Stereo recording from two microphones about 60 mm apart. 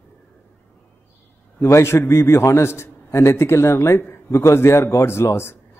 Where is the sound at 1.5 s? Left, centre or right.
Left.